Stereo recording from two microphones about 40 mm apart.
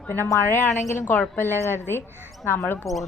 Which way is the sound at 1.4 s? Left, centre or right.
Left.